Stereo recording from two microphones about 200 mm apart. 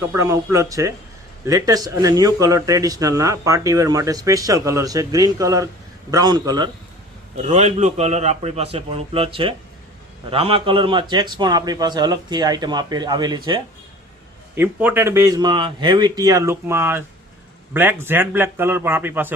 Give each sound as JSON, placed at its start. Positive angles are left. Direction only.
{"t": 0.1, "sound": "a man's voice", "side_deg": -15}
{"t": 7.4, "sound": "a man's voice", "side_deg": -35}
{"t": 14.5, "sound": "a man's voice", "side_deg": -10}